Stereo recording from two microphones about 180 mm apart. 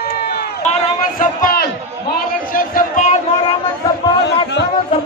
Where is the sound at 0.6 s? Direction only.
45° left (ahead or behind).